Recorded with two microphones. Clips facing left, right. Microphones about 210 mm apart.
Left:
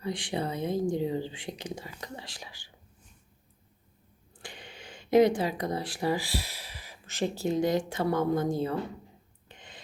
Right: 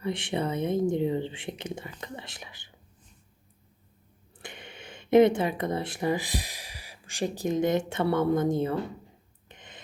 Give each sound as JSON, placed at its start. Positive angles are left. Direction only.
{"t": 0.0, "sound": "speech", "side_deg": -25}
{"t": 4.4, "sound": "speech", "side_deg": -20}
{"t": 9.5, "sound": "a sound", "side_deg": -20}